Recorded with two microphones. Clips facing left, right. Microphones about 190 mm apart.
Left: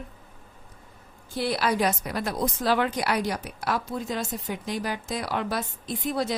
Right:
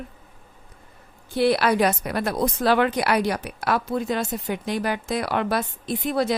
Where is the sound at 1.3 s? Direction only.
65° right (ahead or behind).